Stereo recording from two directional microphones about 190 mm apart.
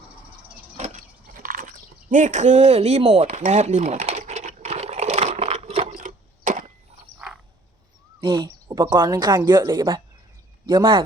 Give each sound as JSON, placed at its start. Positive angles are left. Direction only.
{"t": 0.4, "sound": "a sound", "side_deg": -40}
{"t": 5.9, "sound": "wood", "side_deg": -45}
{"t": 8.2, "sound": "speech", "side_deg": -25}